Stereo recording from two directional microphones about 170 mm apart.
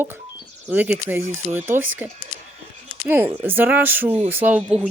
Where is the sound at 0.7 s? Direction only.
10° right (ahead or behind).